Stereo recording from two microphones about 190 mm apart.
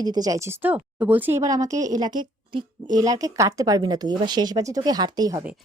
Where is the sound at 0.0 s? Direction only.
20° right (ahead or behind).